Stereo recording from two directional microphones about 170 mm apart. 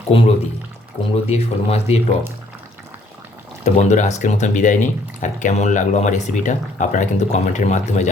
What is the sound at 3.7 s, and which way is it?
Speech, 40° left (ahead or behind).